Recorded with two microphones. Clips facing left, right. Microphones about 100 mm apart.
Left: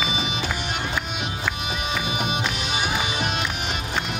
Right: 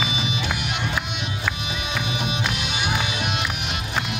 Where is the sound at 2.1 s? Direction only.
45° left (ahead or behind).